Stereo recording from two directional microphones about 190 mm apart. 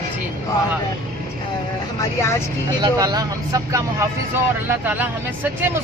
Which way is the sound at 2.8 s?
20° right (ahead or behind).